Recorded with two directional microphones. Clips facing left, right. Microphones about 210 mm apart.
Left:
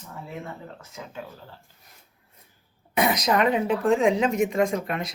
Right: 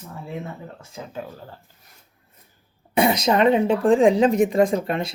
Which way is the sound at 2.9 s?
30° right (ahead or behind).